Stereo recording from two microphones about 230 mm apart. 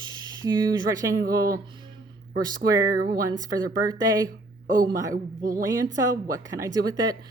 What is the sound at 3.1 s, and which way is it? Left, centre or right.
A woman's voice, centre.